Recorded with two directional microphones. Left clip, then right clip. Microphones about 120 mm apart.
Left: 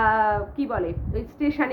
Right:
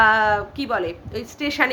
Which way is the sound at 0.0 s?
10° right (ahead or behind).